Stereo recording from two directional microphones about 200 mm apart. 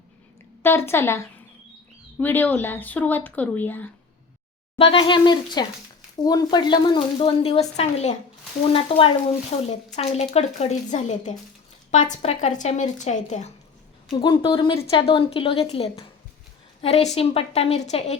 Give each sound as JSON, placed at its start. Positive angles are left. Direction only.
{"t": 0.6, "sound": "speech", "side_deg": 10}
{"t": 4.8, "sound": "a woman's voice", "side_deg": 25}
{"t": 14.1, "sound": "a woman's voice", "side_deg": 20}